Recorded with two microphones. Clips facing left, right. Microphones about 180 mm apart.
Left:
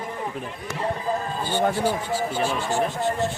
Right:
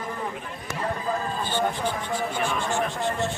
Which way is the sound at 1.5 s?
10° left (ahead or behind).